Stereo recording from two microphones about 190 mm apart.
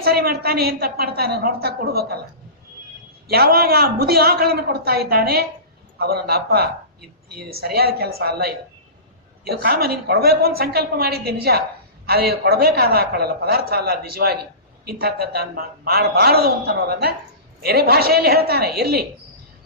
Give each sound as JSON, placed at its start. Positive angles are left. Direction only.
{"t": 0.0, "sound": "a man's voice", "side_deg": -55}
{"t": 3.2, "sound": "a man's voice", "side_deg": -55}